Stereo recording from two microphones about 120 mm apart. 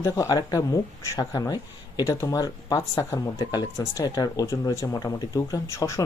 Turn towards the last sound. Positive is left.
turn(degrees=25)  # may be behind; listen again after turning